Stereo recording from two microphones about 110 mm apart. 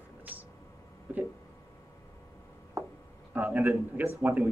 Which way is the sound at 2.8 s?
30° right (ahead or behind).